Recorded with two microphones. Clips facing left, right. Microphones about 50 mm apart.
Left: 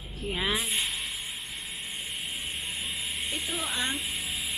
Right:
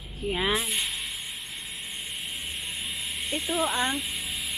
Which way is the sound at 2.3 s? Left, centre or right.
Centre.